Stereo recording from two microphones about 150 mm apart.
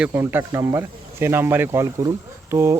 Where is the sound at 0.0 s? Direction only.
15° right (ahead or behind).